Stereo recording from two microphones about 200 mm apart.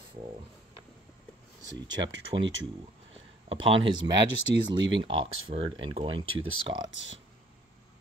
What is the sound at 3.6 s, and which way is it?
Speech, 25° right (ahead or behind).